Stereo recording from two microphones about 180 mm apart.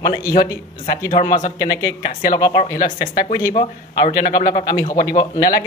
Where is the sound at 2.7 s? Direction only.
55° left (ahead or behind).